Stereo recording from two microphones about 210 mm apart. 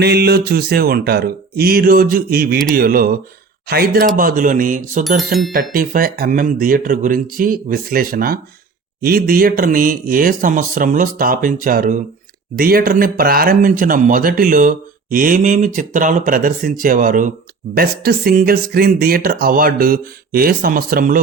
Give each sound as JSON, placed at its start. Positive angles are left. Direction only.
{"t": 0.0, "sound": "speech", "side_deg": -50}